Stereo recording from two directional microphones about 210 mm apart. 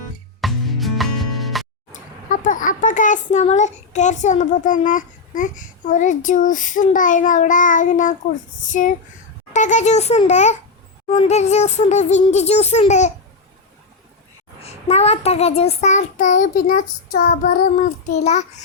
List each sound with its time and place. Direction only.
0.4 s music: centre (ahead or behind)
1.9 s a child's voice: 40° left (ahead or behind)
8.6 s child singing: 35° left (ahead or behind)
14.6 s child singing: 30° left (ahead or behind)